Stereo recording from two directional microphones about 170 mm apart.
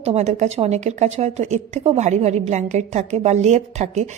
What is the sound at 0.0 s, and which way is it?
A woman's voice, 40° right (ahead or behind).